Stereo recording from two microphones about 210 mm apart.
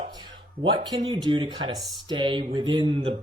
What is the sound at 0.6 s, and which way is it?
Speech, 20° right (ahead or behind).